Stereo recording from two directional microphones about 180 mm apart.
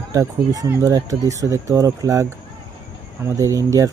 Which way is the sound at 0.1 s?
20° right (ahead or behind).